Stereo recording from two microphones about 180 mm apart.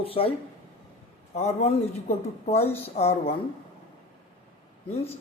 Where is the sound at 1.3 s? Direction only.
35° left (ahead or behind).